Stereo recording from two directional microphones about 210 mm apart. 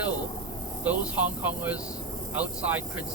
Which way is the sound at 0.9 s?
10° right (ahead or behind).